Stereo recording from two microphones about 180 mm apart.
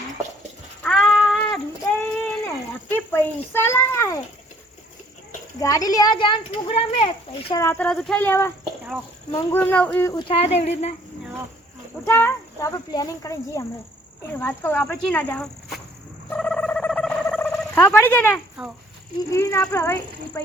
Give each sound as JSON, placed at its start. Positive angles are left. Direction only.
{"t": 0.8, "sound": "child singing", "side_deg": 0}
{"t": 2.9, "sound": "a child's voice", "side_deg": 10}
{"t": 5.5, "sound": "a child's voice", "side_deg": 20}
{"t": 7.6, "sound": "speech", "side_deg": 10}
{"t": 10.2, "sound": "speech", "side_deg": 30}
{"t": 12.0, "sound": "speech", "side_deg": 15}
{"t": 16.3, "sound": "a sound", "side_deg": 5}
{"t": 18.6, "sound": "speech", "side_deg": -5}
{"t": 19.3, "sound": "speech", "side_deg": 15}